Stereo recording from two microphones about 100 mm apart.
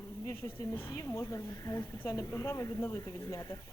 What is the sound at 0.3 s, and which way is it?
Speech, 30° left (ahead or behind).